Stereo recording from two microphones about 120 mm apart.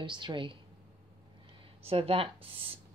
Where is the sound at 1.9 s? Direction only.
50° right (ahead or behind).